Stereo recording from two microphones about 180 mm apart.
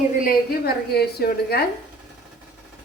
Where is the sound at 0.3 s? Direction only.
60° left (ahead or behind).